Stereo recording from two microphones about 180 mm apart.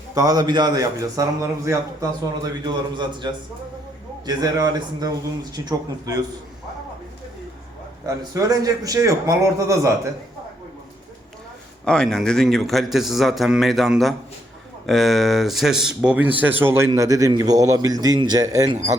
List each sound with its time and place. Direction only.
0.1 s a man's voice: 20° right (ahead or behind)
8.0 s a man's voice: 20° right (ahead or behind)
11.9 s a man's voice: 5° left (ahead or behind); by 18.8 s 20° right (ahead or behind)